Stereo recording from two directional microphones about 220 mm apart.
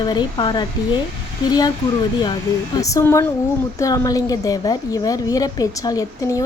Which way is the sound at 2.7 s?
15° left (ahead or behind).